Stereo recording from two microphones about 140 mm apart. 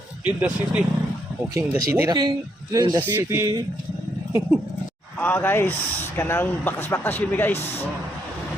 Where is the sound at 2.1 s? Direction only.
30° right (ahead or behind).